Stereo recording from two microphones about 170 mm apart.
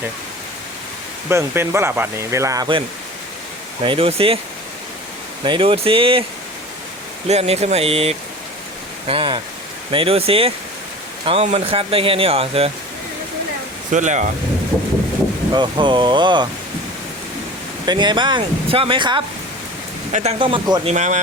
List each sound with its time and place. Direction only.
1.3 s speech: 15° right (ahead or behind)
3.8 s speech: 35° right (ahead or behind)
5.5 s speech: 35° right (ahead or behind)
7.3 s speech: 40° right (ahead or behind)
13.9 s speech: 45° right (ahead or behind)
15.5 s speech: 30° right (ahead or behind)
17.8 s speech: 25° right (ahead or behind)
20.4 s speech: 25° right (ahead or behind)
20.8 s speech: 45° right (ahead or behind)